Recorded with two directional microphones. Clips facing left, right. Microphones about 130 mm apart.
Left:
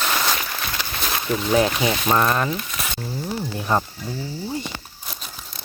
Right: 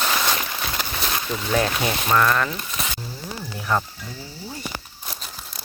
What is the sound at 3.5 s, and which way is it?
Speech, 25° left (ahead or behind).